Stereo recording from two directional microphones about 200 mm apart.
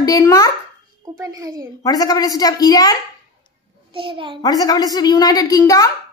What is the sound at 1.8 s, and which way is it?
A woman's voice, 20° left (ahead or behind).